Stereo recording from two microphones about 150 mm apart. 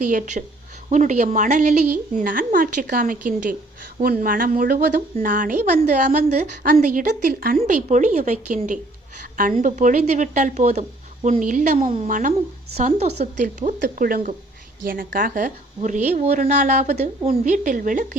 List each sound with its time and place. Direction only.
0.0 s speech: 60° right (ahead or behind)
7.6 s a woman's voice: 50° right (ahead or behind)
12.7 s speech: 45° right (ahead or behind); by 18.2 s 60° right (ahead or behind)